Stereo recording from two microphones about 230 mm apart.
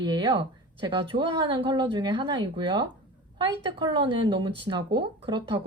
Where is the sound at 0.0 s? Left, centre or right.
Centre.